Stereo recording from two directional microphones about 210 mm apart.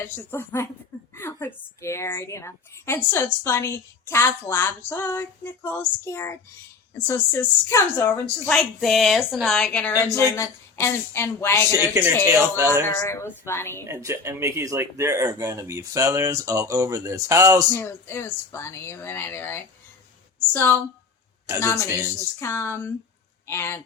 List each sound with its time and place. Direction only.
0.0 s a woman's voice: 10° left (ahead or behind)
11.7 s speech: 10° right (ahead or behind)
13.0 s a woman's voice: 15° left (ahead or behind)
13.8 s speech: 15° right (ahead or behind)
17.7 s a woman's voice: 10° left (ahead or behind)